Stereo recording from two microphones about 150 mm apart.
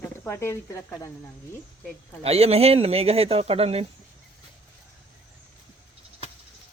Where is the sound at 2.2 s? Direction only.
40° right (ahead or behind).